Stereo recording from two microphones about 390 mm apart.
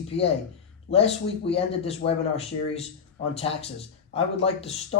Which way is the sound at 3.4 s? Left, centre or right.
Centre.